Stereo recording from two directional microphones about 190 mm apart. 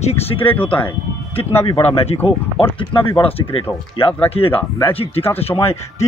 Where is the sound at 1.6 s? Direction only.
35° left (ahead or behind).